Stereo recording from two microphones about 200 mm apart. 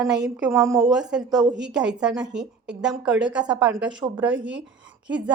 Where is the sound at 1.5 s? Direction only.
60° right (ahead or behind).